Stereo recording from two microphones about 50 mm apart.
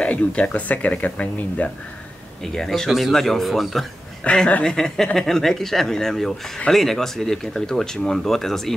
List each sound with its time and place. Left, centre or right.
0.0 s speech: left
2.4 s speech: centre
4.2 s speech: left
4.6 s speech: centre